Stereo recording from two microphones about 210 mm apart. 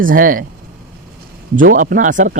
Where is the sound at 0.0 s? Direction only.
40° right (ahead or behind).